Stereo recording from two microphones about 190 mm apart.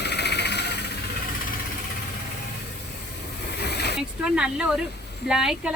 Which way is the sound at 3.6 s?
60° left (ahead or behind).